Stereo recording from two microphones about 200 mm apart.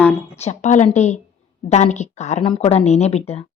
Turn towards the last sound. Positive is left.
turn(degrees=30)  # may be behind; listen again after turning